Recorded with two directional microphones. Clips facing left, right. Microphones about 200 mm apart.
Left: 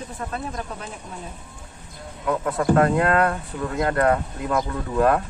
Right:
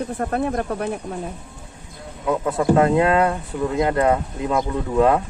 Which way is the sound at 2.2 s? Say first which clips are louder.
Right 2 dB; 20° right (ahead or behind).